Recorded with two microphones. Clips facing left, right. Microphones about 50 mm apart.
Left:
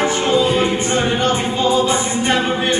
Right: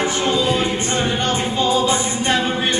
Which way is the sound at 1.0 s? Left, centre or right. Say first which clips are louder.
Left 2 dB; centre.